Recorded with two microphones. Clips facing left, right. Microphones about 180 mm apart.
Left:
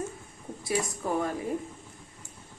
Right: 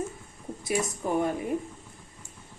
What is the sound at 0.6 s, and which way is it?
Speech, 20° right (ahead or behind).